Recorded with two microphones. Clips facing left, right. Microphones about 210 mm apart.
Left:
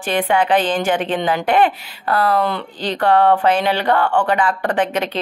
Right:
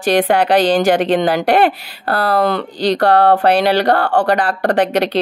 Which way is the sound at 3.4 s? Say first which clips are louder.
Right 4 dB; 70° right (ahead or behind).